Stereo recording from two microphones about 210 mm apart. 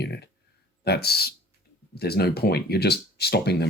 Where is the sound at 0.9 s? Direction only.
50° left (ahead or behind).